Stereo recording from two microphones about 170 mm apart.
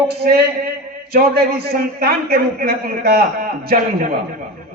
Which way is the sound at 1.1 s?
65° right (ahead or behind).